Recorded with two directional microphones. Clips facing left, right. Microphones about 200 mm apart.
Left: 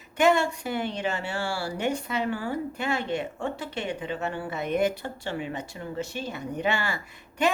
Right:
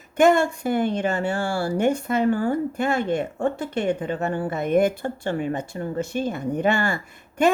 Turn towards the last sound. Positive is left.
turn(degrees=-50)  # may be behind; listen again after turning